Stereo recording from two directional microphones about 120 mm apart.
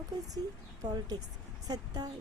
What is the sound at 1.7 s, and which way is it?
Speech, 35° right (ahead or behind).